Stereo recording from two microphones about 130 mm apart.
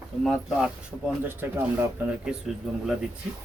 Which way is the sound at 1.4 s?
15° right (ahead or behind).